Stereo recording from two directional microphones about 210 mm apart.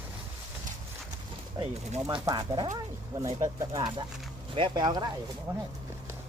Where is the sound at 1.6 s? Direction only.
20° right (ahead or behind).